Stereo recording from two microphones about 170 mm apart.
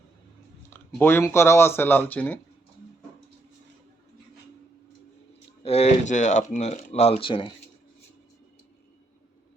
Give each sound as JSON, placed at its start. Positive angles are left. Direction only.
{"t": 0.7, "sound": "speech", "side_deg": 15}
{"t": 5.6, "sound": "speech", "side_deg": 40}